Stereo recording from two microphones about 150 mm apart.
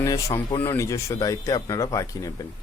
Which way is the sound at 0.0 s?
20° left (ahead or behind).